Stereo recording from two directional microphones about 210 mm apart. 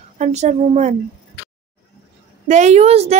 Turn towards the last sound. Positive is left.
turn(degrees=-30)  # may be behind; listen again after turning